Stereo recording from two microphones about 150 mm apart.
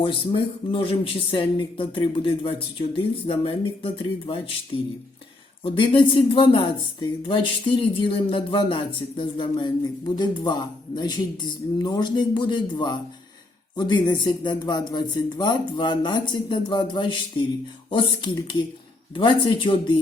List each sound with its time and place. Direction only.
0.0 s speech: 35° left (ahead or behind)
5.6 s speech: 35° left (ahead or behind)